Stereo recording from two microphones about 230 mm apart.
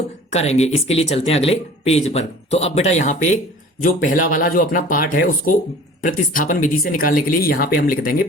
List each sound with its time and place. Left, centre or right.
0.3 s speech: left